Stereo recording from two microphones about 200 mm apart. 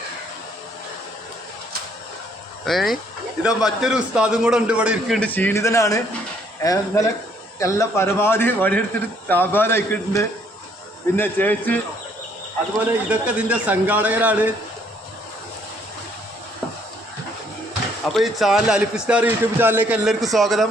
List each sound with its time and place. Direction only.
2.6 s a man's voice: centre (ahead or behind)
12.7 s a man's voice: 5° right (ahead or behind)
18.1 s a man's voice: centre (ahead or behind)